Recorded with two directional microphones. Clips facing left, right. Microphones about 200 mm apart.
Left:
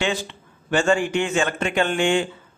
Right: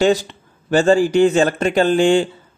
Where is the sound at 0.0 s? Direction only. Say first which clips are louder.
Right 9 dB; 40° right (ahead or behind).